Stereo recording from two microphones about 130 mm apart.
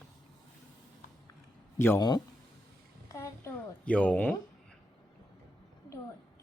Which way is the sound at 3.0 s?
25° left (ahead or behind).